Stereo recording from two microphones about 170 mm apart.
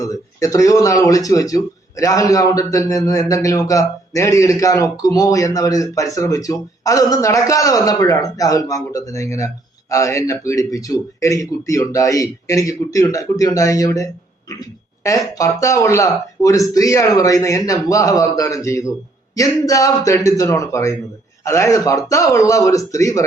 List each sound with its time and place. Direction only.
0.0 s speech: 20° left (ahead or behind)
14.6 s a sound: 20° left (ahead or behind)
15.4 s speech: 20° left (ahead or behind)